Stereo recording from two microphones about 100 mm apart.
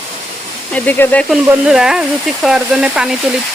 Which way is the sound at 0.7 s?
20° left (ahead or behind).